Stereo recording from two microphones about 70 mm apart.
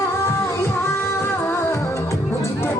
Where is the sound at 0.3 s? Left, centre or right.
Left.